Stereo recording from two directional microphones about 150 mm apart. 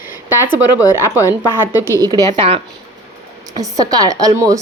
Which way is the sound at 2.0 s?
25° right (ahead or behind).